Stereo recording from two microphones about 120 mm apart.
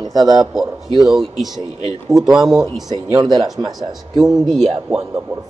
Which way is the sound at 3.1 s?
35° right (ahead or behind).